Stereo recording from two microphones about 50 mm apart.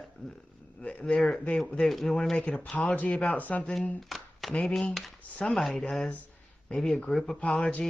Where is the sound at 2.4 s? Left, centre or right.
Centre.